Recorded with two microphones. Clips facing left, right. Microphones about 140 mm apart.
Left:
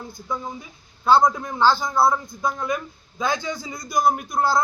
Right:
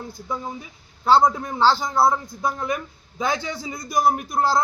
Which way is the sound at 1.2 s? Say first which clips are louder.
Even; 25° right (ahead or behind).